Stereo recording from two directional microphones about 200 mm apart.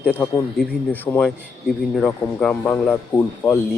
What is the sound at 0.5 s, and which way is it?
A man's voice, 5° left (ahead or behind).